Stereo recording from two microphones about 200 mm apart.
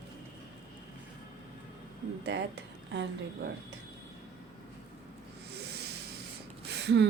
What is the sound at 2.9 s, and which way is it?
Speech, 65° right (ahead or behind).